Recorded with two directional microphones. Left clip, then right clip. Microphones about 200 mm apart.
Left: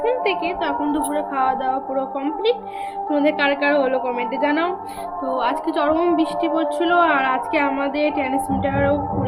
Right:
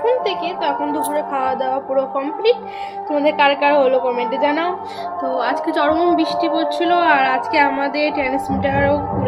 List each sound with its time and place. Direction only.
1.1 s a woman's voice: 15° left (ahead or behind)
8.6 s music: 5° left (ahead or behind)